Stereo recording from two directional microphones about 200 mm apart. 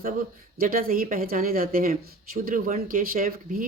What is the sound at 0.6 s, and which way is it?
Speech, 45° right (ahead or behind).